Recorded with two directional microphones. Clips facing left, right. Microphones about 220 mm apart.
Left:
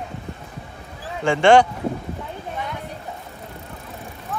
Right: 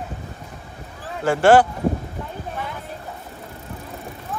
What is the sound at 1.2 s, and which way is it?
Speech, 5° right (ahead or behind).